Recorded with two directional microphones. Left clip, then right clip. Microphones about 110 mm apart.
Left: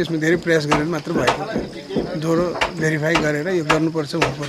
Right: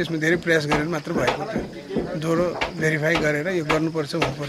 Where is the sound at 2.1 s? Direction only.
Centre (ahead or behind).